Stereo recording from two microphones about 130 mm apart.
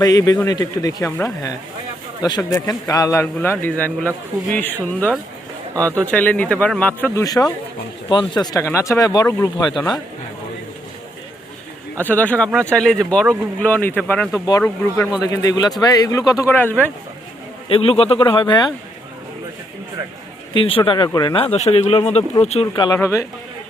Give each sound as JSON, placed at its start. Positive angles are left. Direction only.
{"t": 0.0, "sound": "a man's voice", "side_deg": 30}
{"t": 7.3, "sound": "a man's voice", "side_deg": 30}
{"t": 11.9, "sound": "speech", "side_deg": 15}
{"t": 15.2, "sound": "a man's voice", "side_deg": 25}
{"t": 16.5, "sound": "speech", "side_deg": 15}
{"t": 17.7, "sound": "a man's voice", "side_deg": 45}
{"t": 20.5, "sound": "a man's voice", "side_deg": 45}
{"t": 21.3, "sound": "speech", "side_deg": 55}
{"t": 22.6, "sound": "a man's voice", "side_deg": 30}